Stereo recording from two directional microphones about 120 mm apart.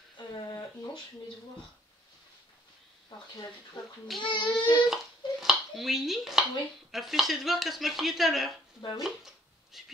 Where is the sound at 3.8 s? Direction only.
35° left (ahead or behind).